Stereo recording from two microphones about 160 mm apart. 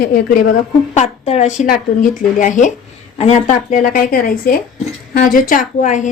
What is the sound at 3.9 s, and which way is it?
A woman's voice, 60° left (ahead or behind).